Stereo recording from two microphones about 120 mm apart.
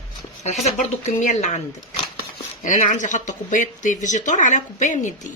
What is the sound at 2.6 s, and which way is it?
Speech, 90° left.